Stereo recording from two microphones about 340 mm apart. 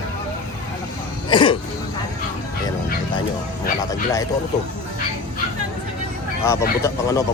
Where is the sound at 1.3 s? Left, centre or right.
Centre.